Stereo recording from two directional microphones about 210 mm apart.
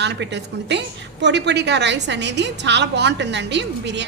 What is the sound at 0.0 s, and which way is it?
A woman's voice, 55° right (ahead or behind).